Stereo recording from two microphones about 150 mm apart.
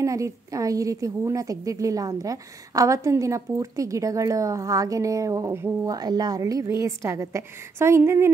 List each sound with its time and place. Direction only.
0.0 s a woman's voice: 20° right (ahead or behind)